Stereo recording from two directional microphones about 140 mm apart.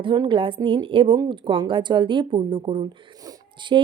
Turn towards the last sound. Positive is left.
turn(degrees=-35)  # may be behind; listen again after turning